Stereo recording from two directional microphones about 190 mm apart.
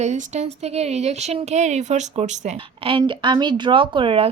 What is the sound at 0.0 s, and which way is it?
Speech, 35° right (ahead or behind).